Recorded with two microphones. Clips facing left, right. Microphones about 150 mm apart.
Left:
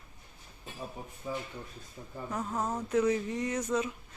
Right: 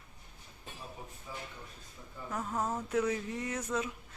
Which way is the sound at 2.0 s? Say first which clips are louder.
Left 6 dB; 45° left (ahead or behind).